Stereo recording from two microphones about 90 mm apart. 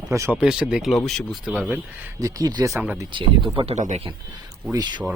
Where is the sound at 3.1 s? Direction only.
65° right (ahead or behind).